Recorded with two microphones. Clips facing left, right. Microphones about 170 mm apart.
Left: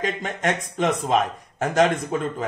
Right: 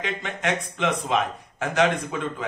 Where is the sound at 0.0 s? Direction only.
40° left (ahead or behind).